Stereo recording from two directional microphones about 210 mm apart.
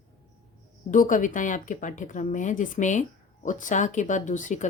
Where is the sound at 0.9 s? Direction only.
40° left (ahead or behind).